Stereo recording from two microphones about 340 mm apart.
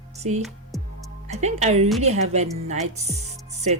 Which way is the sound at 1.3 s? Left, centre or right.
Centre.